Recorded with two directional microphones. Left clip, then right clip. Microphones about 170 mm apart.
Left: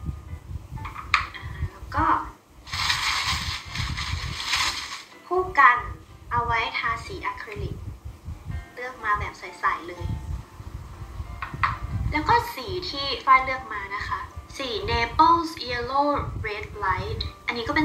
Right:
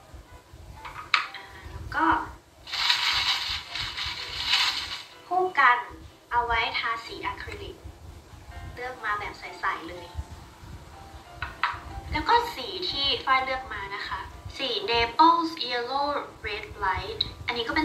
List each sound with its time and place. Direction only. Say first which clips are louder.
0.8 s a sound: left 2 dB; 30° left (ahead or behind)
8.7 s music: left 4 dB; 30° left (ahead or behind)
11.3 s music: left 3 dB; 30° left (ahead or behind)